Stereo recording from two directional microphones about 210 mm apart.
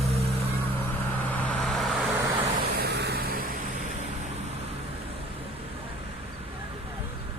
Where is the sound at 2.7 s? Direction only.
50° right (ahead or behind).